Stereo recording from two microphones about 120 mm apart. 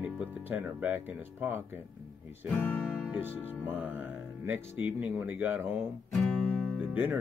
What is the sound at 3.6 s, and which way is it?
Speech, 15° right (ahead or behind).